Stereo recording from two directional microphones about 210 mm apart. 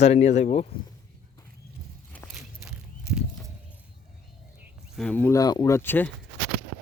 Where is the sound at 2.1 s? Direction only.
5° left (ahead or behind).